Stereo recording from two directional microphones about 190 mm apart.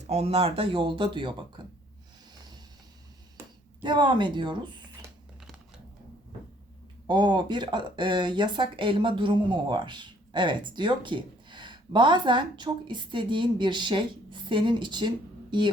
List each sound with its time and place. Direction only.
0.1 s speech: 35° right (ahead or behind)
3.8 s speech: 25° right (ahead or behind)
7.1 s speech: 25° right (ahead or behind)